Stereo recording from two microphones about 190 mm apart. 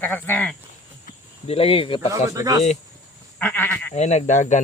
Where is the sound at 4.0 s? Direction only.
35° left (ahead or behind).